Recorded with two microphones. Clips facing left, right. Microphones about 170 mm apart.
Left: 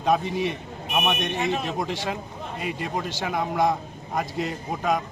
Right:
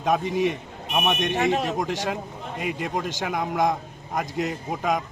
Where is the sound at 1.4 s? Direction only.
70° right (ahead or behind).